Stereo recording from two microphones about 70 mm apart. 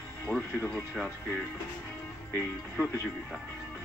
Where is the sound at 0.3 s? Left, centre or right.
Left.